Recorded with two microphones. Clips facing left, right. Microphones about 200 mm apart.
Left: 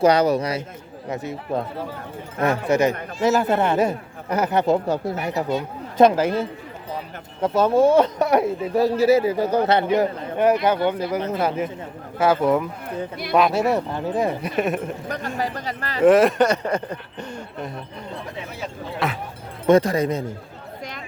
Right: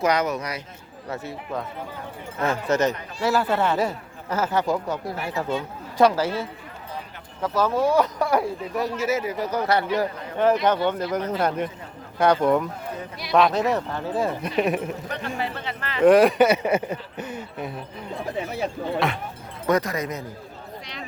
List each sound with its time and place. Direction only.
0.0 s speech: 30° left (ahead or behind)
1.0 s speech: 20° left (ahead or behind)
2.6 s speech: 10° left (ahead or behind)
7.4 s speech: 25° left (ahead or behind)
14.5 s speech: centre (ahead or behind)
15.4 s speech: 40° left (ahead or behind)
16.0 s speech: centre (ahead or behind)
18.9 s speech: centre (ahead or behind)
19.6 s speech: 30° left (ahead or behind)